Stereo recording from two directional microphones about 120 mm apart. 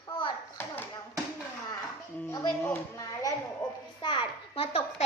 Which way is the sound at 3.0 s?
30° left (ahead or behind).